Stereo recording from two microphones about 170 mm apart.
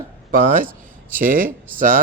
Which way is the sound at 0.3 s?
55° right (ahead or behind).